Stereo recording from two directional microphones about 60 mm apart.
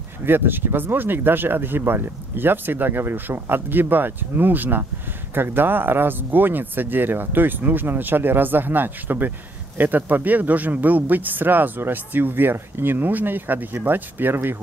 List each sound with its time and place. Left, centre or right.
0.2 s speech: right